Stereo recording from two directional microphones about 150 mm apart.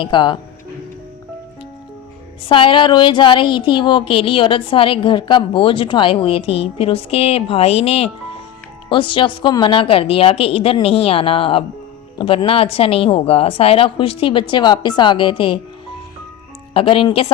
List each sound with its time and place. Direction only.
0.0 s speech: 30° left (ahead or behind)
2.5 s speech: 35° left (ahead or behind)
16.7 s speech: 35° left (ahead or behind)